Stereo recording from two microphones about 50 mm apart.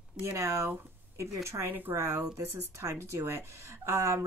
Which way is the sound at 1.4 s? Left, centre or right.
Right.